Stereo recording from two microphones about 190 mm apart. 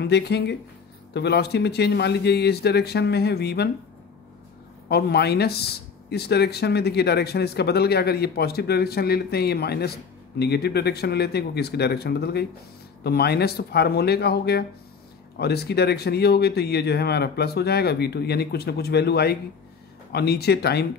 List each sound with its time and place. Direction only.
0.0 s speech: 60° left (ahead or behind)
4.8 s speech: 60° left (ahead or behind)